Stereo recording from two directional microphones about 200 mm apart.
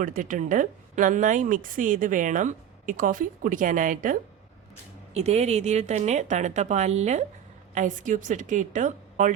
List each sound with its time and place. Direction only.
0.0 s speech: 40° right (ahead or behind)